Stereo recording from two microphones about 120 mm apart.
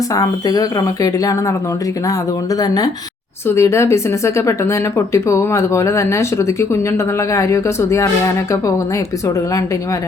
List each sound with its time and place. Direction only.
0.1 s a woman's voice: 30° left (ahead or behind)
2.6 s a woman's voice: 30° left (ahead or behind)